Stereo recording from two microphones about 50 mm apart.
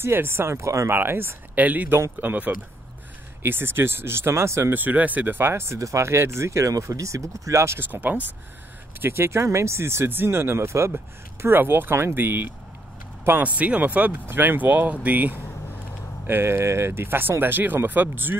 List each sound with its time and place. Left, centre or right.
0.0 s speech: right
0.8 s speech: right
1.5 s speech: right
3.4 s speech: right
4.7 s speech: right
5.5 s speech: right
7.9 s speech: right
9.0 s speech: right
11.4 s speech: right
13.4 s speech: right
16.3 s speech: right